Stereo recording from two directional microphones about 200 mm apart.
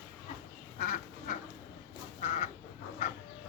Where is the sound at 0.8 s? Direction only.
40° left (ahead or behind).